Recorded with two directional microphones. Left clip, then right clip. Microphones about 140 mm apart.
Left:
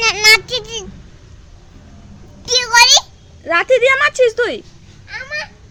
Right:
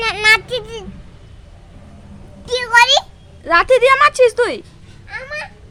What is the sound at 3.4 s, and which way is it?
A woman's voice, 10° right (ahead or behind).